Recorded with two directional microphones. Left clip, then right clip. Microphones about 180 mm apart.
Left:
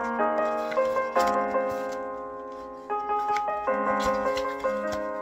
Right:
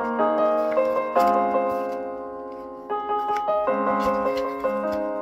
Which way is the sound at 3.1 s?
50° right (ahead or behind).